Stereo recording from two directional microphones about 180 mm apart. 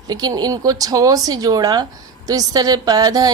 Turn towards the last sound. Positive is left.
turn(degrees=-20)  # may be behind; listen again after turning